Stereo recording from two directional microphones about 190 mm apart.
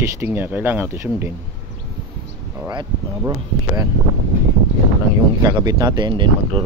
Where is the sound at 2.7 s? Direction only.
20° right (ahead or behind).